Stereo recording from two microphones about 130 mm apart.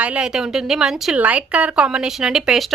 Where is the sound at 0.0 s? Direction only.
10° right (ahead or behind).